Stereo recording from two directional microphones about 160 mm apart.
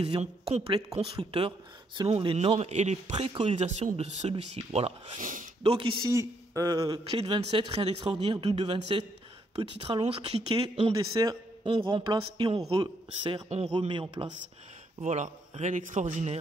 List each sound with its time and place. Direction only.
0.2 s speech: 40° right (ahead or behind)
5.2 s speech: 55° right (ahead or behind)
5.6 s speech: 40° right (ahead or behind)
6.0 s speech: 20° right (ahead or behind)
7.1 s speech: 35° right (ahead or behind)
13.5 s speech: 45° right (ahead or behind)
13.7 s speech: 30° right (ahead or behind)
15.0 s speech: 45° right (ahead or behind)